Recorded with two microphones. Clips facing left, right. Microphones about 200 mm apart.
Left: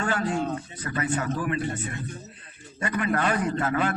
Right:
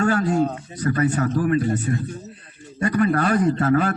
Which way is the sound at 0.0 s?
40° right (ahead or behind).